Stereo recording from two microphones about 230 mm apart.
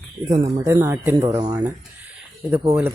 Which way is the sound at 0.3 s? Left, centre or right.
Centre.